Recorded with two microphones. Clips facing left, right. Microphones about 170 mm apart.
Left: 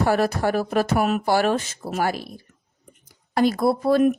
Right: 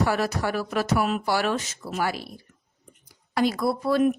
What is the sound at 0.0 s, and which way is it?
Speech, 50° left (ahead or behind).